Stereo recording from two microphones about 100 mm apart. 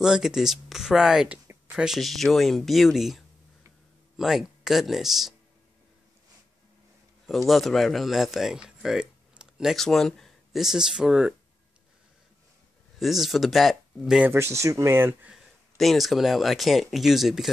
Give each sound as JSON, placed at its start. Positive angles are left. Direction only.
{"t": 0.0, "sound": "speech", "side_deg": -5}
{"t": 2.0, "sound": "speech", "side_deg": 0}
{"t": 7.2, "sound": "speech", "side_deg": 0}
{"t": 9.8, "sound": "speech", "side_deg": 5}
{"t": 13.0, "sound": "speech", "side_deg": 0}
{"t": 14.2, "sound": "speech", "side_deg": -25}
{"t": 15.3, "sound": "speech", "side_deg": 0}